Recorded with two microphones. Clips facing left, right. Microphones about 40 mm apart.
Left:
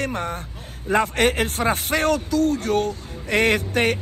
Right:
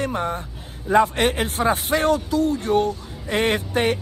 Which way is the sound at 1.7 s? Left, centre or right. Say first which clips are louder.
Right 2 dB; left.